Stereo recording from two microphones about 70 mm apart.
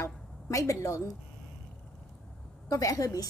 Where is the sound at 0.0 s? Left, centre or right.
Left.